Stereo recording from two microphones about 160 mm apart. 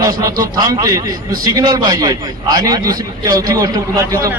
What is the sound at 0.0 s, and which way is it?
A man's voice, 20° right (ahead or behind).